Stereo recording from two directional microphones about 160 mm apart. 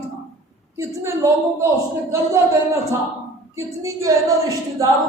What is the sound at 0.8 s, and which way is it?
Speech, 15° right (ahead or behind).